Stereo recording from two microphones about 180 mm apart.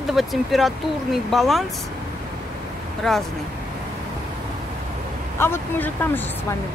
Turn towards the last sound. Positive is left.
turn(degrees=10)  # may be behind; listen again after turning